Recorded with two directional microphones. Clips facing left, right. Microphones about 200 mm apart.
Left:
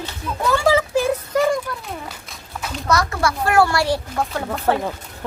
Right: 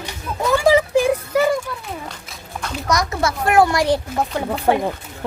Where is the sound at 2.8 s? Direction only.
20° right (ahead or behind).